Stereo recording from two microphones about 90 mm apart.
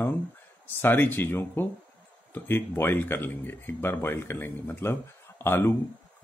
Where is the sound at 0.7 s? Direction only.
20° left (ahead or behind).